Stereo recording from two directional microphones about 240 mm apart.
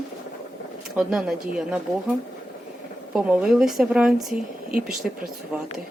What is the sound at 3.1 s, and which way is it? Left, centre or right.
A woman's voice, centre.